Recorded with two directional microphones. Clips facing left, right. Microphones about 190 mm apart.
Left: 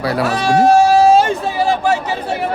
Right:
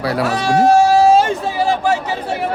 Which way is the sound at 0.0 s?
60° left (ahead or behind).